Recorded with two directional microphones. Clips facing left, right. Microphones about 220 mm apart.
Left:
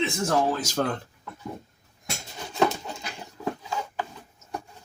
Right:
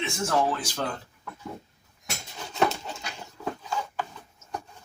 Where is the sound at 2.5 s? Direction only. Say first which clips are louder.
Left 2 dB; 15° left (ahead or behind).